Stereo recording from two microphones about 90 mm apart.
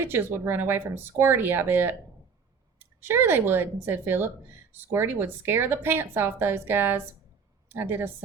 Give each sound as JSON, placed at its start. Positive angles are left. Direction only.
{"t": 0.0, "sound": "speech", "side_deg": -25}